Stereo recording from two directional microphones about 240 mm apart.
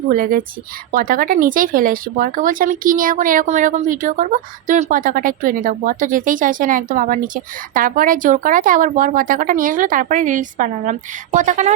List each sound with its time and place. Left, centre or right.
0.1 s speech: right